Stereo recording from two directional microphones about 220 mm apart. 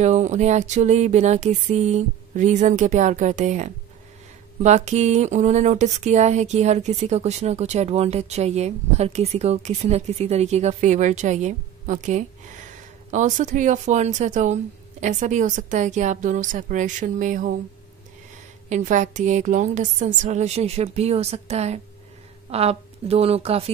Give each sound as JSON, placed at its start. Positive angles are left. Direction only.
{"t": 0.0, "sound": "speech", "side_deg": -30}
{"t": 18.7, "sound": "a woman's voice", "side_deg": -35}